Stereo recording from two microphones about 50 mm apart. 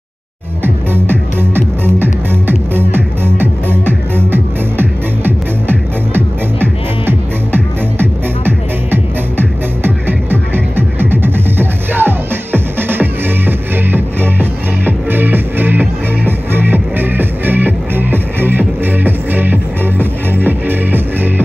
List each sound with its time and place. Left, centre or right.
0.9 s music: right